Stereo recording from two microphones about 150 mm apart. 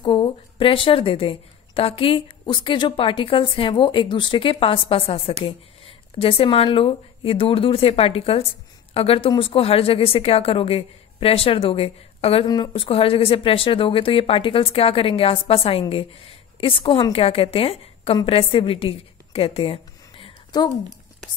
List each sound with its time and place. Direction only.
0.0 s a woman's voice: 35° left (ahead or behind)